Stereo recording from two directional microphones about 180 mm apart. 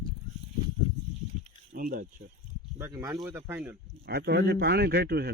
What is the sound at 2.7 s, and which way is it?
Speech, 15° right (ahead or behind).